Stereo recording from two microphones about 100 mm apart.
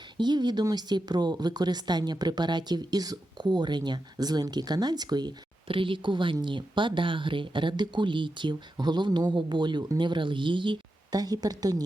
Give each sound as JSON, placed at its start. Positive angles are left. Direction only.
{"t": 0.2, "sound": "a woman's voice", "side_deg": -45}
{"t": 5.6, "sound": "a woman's voice", "side_deg": -60}